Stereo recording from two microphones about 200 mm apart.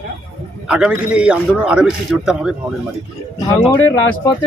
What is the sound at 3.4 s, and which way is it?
Speech, 15° left (ahead or behind).